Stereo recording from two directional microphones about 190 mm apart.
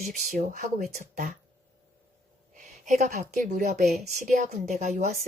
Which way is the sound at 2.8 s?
40° right (ahead or behind).